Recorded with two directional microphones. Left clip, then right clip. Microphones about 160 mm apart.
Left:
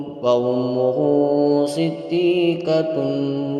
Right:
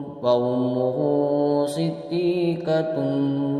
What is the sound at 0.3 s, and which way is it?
A man's voice, 15° left (ahead or behind).